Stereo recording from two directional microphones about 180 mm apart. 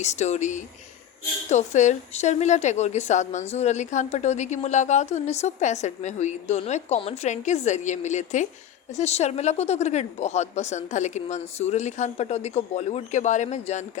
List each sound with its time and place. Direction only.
0.0 s a woman's voice: 40° left (ahead or behind)